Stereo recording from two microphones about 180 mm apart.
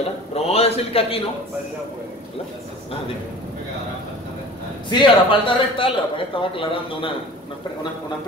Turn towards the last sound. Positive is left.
turn(degrees=30)  # may be behind; listen again after turning